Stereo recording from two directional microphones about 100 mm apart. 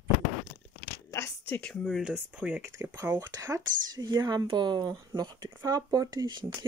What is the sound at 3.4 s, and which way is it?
Speech, 35° right (ahead or behind).